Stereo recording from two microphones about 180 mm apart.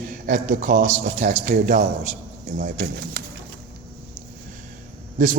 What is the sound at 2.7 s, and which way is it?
Speech, 60° right (ahead or behind).